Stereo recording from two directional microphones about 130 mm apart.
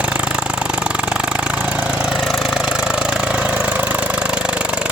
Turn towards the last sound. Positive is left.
turn(degrees=-10)  # may be behind; listen again after turning